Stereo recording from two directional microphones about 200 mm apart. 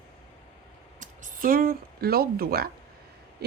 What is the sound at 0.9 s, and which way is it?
Speech, 40° right (ahead or behind).